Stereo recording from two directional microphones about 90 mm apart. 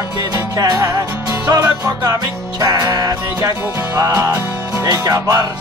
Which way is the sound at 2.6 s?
40° right (ahead or behind).